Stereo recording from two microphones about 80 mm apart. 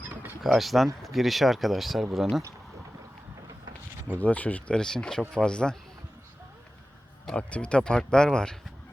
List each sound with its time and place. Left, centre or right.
0.0 s a sound: right
0.4 s speech: centre
4.2 s speech: centre
7.3 s speech: centre